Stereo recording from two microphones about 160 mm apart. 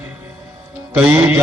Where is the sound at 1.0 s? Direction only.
5° right (ahead or behind).